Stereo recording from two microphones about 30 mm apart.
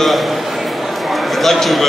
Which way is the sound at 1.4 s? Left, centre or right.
Centre.